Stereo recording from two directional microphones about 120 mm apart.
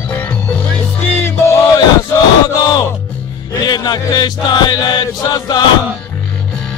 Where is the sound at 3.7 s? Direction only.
35° left (ahead or behind).